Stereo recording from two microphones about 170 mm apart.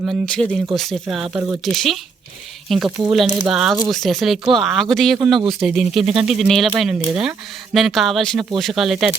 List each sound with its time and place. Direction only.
0.0 s speech: centre (ahead or behind)